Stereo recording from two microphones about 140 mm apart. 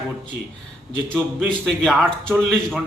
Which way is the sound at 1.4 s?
5° left (ahead or behind).